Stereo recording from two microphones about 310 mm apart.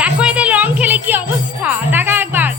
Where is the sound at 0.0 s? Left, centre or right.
Centre.